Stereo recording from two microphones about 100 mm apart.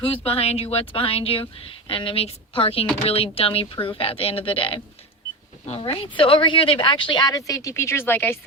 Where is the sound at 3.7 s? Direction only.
60° left (ahead or behind).